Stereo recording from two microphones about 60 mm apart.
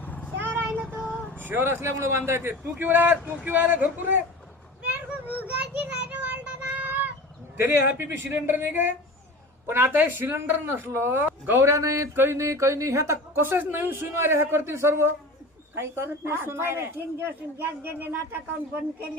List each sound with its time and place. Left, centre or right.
0.0 s vehicle: left
0.3 s vehicle: right
1.0 s vehicle: centre
1.4 s a man's voice: right
4.9 s children playing: right
5.5 s child singing: right
7.5 s a man's voice: right
11.6 s a woman's voice: right
12.1 s a man's voice: right
12.4 s a woman's voice: right
13.3 s a man's voice: right